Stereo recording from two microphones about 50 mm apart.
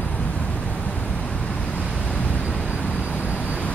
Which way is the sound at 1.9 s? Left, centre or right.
Left.